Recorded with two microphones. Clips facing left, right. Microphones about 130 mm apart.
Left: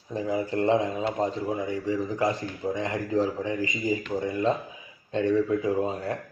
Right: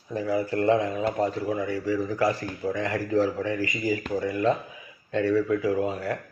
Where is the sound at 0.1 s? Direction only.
20° left (ahead or behind).